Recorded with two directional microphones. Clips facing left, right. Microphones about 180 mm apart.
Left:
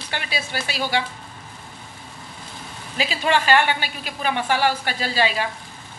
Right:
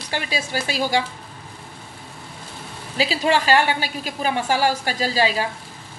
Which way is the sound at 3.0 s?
35° right (ahead or behind).